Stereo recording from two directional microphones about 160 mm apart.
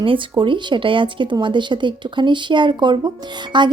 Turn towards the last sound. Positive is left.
turn(degrees=-30)  # may be behind; listen again after turning